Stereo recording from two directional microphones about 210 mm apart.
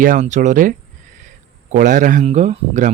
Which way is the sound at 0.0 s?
35° right (ahead or behind).